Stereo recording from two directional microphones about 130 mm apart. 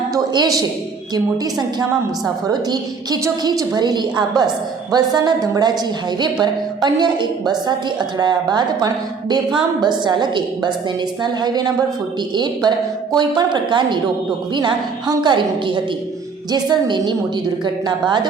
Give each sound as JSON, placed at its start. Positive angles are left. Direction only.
{"t": 0.1, "sound": "a woman's voice", "side_deg": -30}
{"t": 2.2, "sound": "a woman's voice", "side_deg": -30}